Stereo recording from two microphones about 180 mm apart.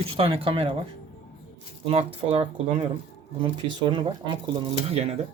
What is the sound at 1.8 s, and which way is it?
Speech, 30° right (ahead or behind).